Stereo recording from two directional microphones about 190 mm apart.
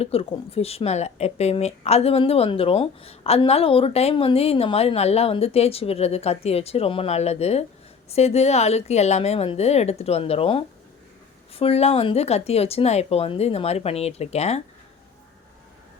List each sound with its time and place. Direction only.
0.0 s speech: 30° left (ahead or behind)